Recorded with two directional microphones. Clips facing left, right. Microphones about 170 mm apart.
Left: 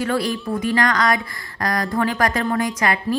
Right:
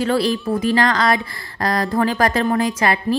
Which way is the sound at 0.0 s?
30° right (ahead or behind).